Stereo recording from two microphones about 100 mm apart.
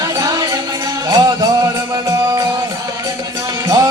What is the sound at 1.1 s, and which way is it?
Music, 40° right (ahead or behind).